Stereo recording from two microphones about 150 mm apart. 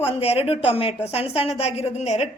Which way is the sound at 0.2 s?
40° left (ahead or behind).